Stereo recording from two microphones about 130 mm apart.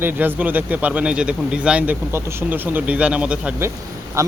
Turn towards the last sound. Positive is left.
turn(degrees=-25)  # may be behind; listen again after turning